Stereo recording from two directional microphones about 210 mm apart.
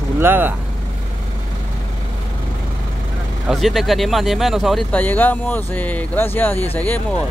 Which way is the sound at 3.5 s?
Centre (ahead or behind).